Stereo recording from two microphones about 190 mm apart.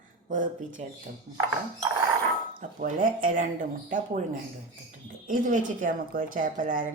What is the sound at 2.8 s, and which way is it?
A woman's voice, 45° right (ahead or behind).